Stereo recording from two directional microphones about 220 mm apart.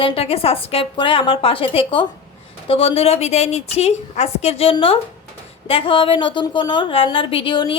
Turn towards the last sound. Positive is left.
turn(degrees=20)  # may be behind; listen again after turning